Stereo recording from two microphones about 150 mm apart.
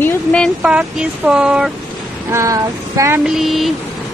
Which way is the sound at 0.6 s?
5° right (ahead or behind).